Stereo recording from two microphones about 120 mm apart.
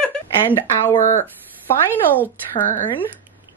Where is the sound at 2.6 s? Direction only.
90° left.